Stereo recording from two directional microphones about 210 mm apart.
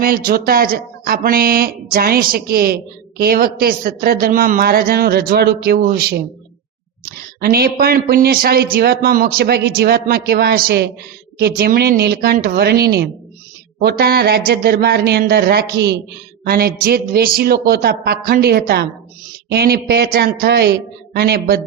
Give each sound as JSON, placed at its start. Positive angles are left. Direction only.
{"t": 0.0, "sound": "a man's voice", "side_deg": -45}
{"t": 7.4, "sound": "a man's voice", "side_deg": -45}